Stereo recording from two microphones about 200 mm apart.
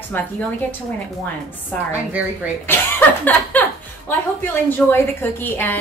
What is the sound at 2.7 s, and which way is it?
Speech, 10° left (ahead or behind).